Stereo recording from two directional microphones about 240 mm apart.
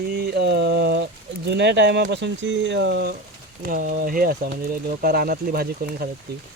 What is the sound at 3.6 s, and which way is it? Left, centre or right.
Speech, right.